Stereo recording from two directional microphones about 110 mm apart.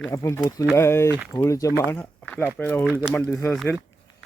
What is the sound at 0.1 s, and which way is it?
Speech, 25° left (ahead or behind).